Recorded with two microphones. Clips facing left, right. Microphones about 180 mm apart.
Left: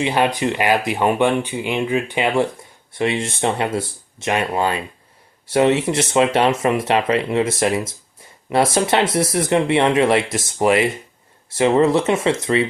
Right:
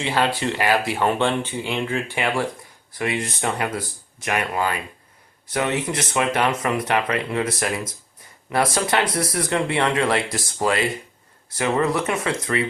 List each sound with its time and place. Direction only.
0.0 s speech: 15° left (ahead or behind)